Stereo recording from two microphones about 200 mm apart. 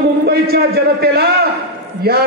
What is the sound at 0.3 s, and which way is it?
Speech, 50° right (ahead or behind).